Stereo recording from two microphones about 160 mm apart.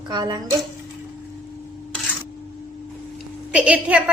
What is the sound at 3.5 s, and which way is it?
Speech, 5° right (ahead or behind).